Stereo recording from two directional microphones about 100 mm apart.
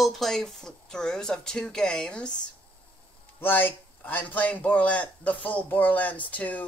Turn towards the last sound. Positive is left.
turn(degrees=15)  # may be behind; listen again after turning